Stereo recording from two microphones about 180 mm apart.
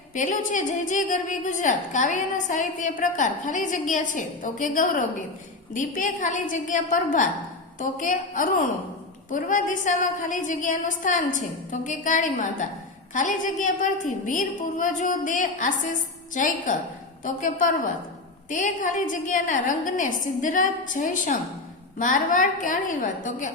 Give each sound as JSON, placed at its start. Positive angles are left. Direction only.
{"t": 0.1, "sound": "a woman's voice", "side_deg": 45}